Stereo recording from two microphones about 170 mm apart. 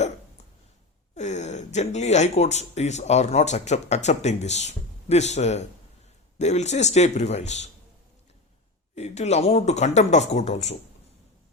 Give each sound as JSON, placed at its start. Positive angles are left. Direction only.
{"t": 1.1, "sound": "speech", "side_deg": 40}
{"t": 9.0, "sound": "speech", "side_deg": 40}